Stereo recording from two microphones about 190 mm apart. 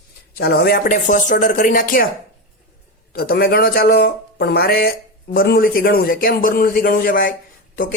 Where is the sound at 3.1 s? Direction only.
55° left (ahead or behind).